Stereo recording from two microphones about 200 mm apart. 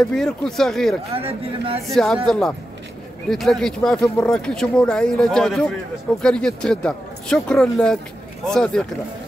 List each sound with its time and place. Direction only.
0.0 s speech: 5° left (ahead or behind)
1.1 s speech: 30° right (ahead or behind)
2.2 s speech: centre (ahead or behind)